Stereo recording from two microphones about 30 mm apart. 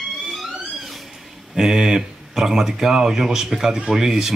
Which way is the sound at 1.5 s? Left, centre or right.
Right.